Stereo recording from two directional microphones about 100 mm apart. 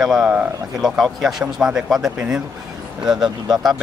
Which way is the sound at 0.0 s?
5° right (ahead or behind).